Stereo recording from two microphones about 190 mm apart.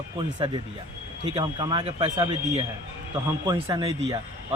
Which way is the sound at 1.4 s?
30° right (ahead or behind).